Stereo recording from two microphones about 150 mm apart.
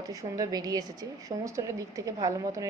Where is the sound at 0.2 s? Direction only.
25° right (ahead or behind).